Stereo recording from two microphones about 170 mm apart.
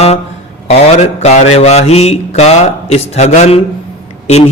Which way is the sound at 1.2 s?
40° left (ahead or behind).